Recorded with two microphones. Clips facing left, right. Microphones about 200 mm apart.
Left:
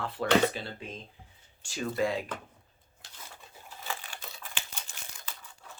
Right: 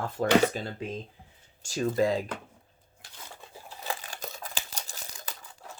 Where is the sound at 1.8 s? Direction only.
35° right (ahead or behind).